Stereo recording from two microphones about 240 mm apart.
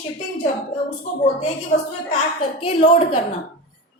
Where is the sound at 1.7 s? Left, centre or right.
Left.